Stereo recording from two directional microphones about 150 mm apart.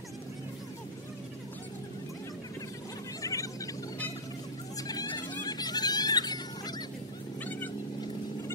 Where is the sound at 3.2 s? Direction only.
20° left (ahead or behind).